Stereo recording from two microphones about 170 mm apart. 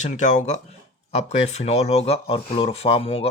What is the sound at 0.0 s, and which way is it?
Speech, 45° left (ahead or behind).